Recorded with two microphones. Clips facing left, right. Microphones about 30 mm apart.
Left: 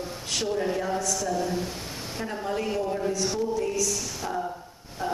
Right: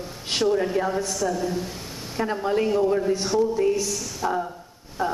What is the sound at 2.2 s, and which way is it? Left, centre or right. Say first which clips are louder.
Speech: right 7 dB; centre.